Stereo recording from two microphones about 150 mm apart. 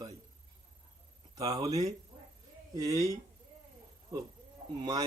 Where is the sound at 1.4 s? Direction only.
25° right (ahead or behind).